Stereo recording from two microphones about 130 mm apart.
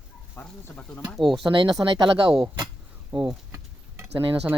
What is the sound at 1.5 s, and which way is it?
Speech, 35° right (ahead or behind).